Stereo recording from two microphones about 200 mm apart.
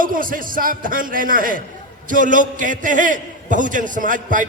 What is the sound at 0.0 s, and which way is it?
A man's voice, 45° right (ahead or behind).